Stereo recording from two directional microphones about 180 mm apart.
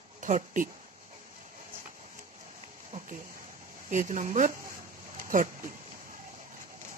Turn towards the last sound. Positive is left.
turn(degrees=-50)  # may be behind; listen again after turning